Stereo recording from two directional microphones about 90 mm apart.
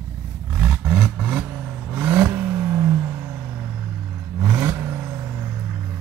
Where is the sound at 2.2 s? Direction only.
25° right (ahead or behind).